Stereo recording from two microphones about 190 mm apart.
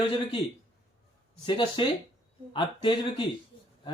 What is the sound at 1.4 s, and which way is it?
Speech, 25° left (ahead or behind).